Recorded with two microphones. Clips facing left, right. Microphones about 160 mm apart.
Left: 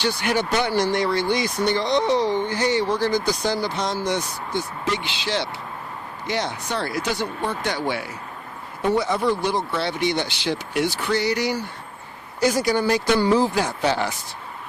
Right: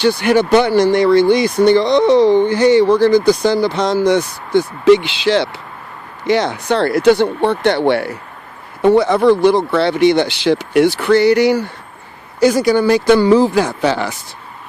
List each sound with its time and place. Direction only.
0.0 s speech: 65° right (ahead or behind)
12.4 s speech: 80° right